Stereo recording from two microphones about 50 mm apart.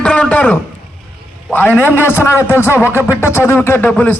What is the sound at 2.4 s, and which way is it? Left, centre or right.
Speech, left.